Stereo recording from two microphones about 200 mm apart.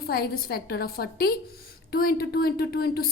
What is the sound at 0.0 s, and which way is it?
A woman's voice, 50° left (ahead or behind).